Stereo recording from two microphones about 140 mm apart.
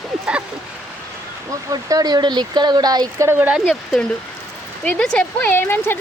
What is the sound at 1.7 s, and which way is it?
Speech, 25° right (ahead or behind).